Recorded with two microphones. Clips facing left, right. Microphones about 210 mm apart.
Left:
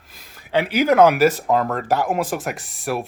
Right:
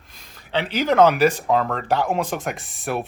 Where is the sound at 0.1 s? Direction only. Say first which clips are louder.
Left 4 dB; 10° left (ahead or behind).